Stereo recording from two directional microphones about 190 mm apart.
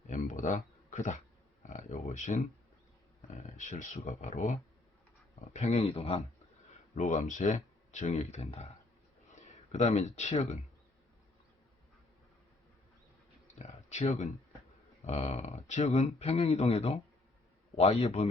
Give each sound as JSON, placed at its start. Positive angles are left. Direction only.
{"t": 0.1, "sound": "a sound", "side_deg": 40}
{"t": 3.2, "sound": "speech", "side_deg": 40}
{"t": 5.5, "sound": "speech", "side_deg": 35}
{"t": 13.6, "sound": "speech", "side_deg": 35}